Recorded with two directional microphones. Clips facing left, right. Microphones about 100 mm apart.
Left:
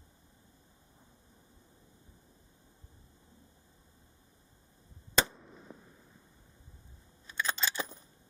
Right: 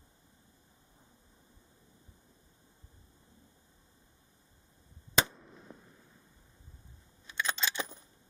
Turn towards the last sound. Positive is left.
turn(degrees=5)  # may be behind; listen again after turning